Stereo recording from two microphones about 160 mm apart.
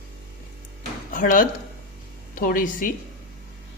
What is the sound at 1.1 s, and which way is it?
A woman's voice, 60° left (ahead or behind).